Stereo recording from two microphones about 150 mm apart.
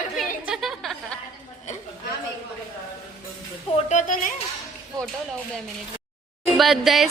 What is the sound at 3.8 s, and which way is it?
Speech, 55° left (ahead or behind).